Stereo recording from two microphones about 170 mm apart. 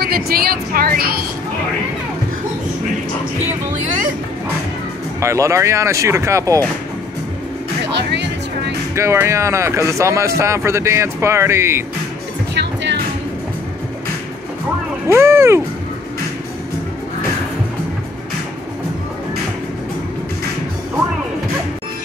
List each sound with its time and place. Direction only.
0.0 s a woman's voice: 65° right (ahead or behind)
5.2 s speech: 15° right (ahead or behind)
7.9 s music: 90° right
8.9 s speech: 15° right (ahead or behind)
15.0 s speech: 15° right (ahead or behind)